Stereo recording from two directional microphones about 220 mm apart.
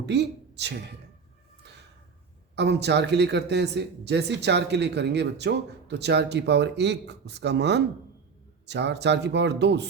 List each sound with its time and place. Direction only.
0.0 s a woman's voice: 50° right (ahead or behind)
2.6 s speech: 50° right (ahead or behind)